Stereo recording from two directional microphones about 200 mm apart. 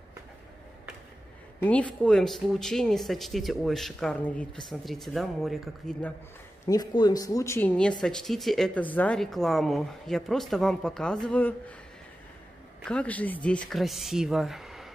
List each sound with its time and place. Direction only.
1.6 s speech: 5° left (ahead or behind)
6.6 s speech: 20° left (ahead or behind)
12.8 s speech: 5° left (ahead or behind)